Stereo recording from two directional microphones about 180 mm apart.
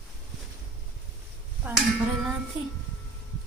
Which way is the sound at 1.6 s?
10° right (ahead or behind).